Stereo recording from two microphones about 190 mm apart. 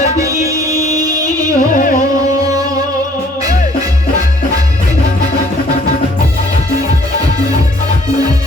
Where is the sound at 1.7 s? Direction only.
45° left (ahead or behind).